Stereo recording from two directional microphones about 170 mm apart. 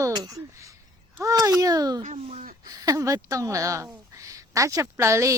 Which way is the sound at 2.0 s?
45° right (ahead or behind).